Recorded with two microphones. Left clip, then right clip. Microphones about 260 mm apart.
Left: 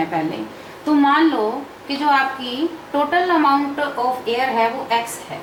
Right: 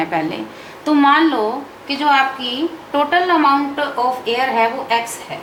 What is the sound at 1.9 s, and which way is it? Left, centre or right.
A woman's voice, centre.